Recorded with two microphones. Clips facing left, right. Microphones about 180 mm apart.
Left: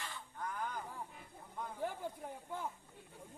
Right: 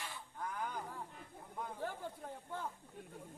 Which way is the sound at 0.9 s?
5° left (ahead or behind).